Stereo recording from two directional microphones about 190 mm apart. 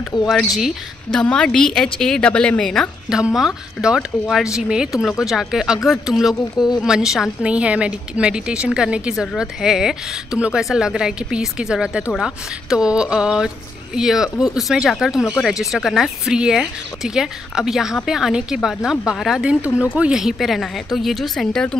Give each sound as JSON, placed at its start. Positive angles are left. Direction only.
{"t": 0.1, "sound": "speech", "side_deg": 20}
{"t": 0.6, "sound": "a woman's voice", "side_deg": 0}